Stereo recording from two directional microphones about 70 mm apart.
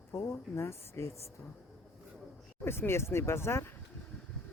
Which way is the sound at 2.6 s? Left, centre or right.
Left.